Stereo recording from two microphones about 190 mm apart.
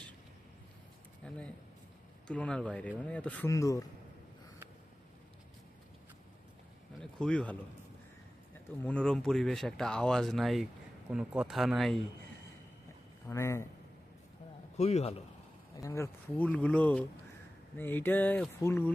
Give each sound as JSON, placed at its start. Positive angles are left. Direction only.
{"t": 1.2, "sound": "speech", "side_deg": 5}
{"t": 7.0, "sound": "speech", "side_deg": 5}
{"t": 8.8, "sound": "speech", "side_deg": 5}
{"t": 13.2, "sound": "speech", "side_deg": 15}
{"t": 14.8, "sound": "a man's voice", "side_deg": 35}
{"t": 15.7, "sound": "speech", "side_deg": 15}